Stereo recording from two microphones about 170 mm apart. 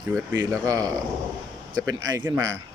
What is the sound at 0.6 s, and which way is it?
A man's voice, 20° right (ahead or behind).